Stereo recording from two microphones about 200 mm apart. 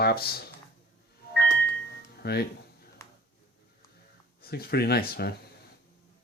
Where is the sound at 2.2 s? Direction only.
55° left (ahead or behind).